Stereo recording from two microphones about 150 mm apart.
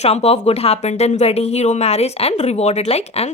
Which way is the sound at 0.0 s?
45° left (ahead or behind).